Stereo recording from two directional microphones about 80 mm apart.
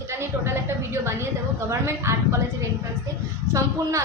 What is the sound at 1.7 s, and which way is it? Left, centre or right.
Speech, right.